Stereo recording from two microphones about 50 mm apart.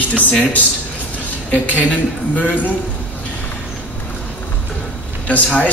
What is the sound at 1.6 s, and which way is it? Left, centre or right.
Speech, left.